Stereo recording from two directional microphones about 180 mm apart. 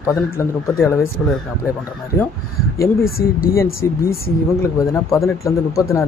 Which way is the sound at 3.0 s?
55° left (ahead or behind).